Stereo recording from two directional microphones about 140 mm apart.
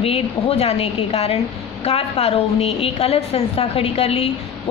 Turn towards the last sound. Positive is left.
turn(degrees=45)  # may be behind; listen again after turning